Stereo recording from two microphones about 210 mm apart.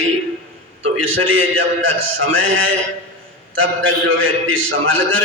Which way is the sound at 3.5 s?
65° right (ahead or behind).